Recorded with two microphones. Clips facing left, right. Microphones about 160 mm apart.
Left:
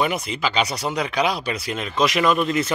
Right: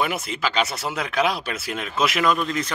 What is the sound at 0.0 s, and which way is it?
Speech, 5° right (ahead or behind).